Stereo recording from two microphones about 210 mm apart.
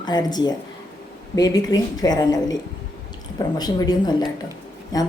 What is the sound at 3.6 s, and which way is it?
A woman's voice, 20° left (ahead or behind).